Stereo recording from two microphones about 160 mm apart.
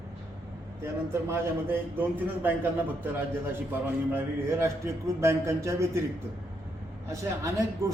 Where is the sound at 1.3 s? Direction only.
10° right (ahead or behind).